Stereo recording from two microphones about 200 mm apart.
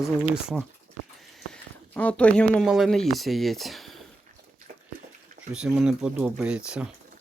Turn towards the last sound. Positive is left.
turn(degrees=-5)  # may be behind; listen again after turning